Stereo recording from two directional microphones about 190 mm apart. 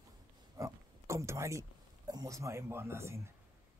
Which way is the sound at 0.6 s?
15° right (ahead or behind).